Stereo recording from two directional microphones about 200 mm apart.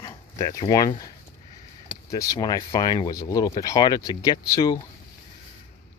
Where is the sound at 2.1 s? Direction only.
15° left (ahead or behind).